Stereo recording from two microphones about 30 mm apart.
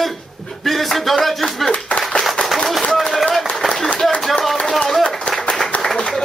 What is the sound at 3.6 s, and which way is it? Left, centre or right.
Clapping, centre.